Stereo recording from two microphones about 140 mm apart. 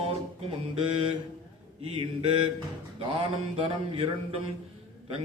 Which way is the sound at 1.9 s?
45° right (ahead or behind).